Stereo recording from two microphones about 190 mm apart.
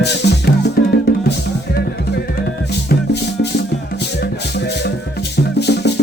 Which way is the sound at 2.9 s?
60° left (ahead or behind).